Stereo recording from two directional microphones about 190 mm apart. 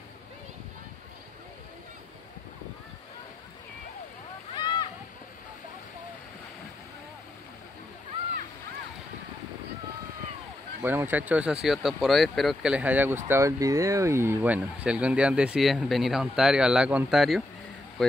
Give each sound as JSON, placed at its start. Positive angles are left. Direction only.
{"t": 4.6, "sound": "splash", "side_deg": 25}
{"t": 10.8, "sound": "speech", "side_deg": -10}